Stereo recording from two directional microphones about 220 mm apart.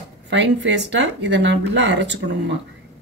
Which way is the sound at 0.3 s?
55° right (ahead or behind).